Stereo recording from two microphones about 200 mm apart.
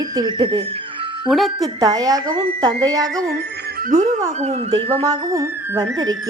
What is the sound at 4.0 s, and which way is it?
Speech, 35° right (ahead or behind).